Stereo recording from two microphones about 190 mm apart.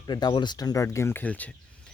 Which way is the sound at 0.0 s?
20° left (ahead or behind).